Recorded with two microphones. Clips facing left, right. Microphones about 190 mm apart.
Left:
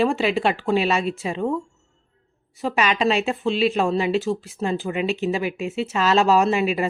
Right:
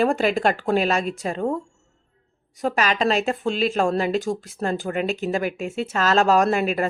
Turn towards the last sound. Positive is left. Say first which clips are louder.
# even
turn(degrees=-45)  # may be behind; listen again after turning